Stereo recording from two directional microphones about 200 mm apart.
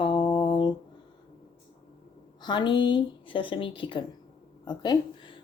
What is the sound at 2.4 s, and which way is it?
Speech, 20° left (ahead or behind).